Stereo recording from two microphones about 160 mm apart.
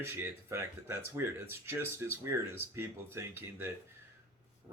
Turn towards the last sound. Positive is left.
turn(degrees=-15)  # may be behind; listen again after turning